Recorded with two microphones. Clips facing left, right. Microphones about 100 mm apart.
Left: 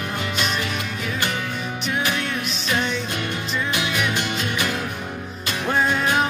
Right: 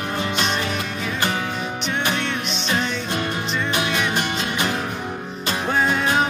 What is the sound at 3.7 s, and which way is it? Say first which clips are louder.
Music: right 2 dB; 30° right (ahead or behind).